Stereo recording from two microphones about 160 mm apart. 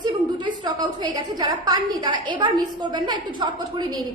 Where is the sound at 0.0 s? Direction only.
25° right (ahead or behind).